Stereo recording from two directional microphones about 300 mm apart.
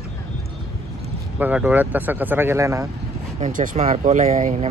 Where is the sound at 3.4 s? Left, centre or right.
Right.